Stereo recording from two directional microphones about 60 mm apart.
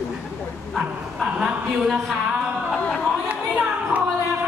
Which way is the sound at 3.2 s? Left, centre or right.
Right.